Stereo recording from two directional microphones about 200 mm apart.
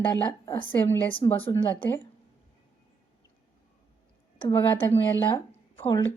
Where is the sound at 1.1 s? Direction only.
25° left (ahead or behind).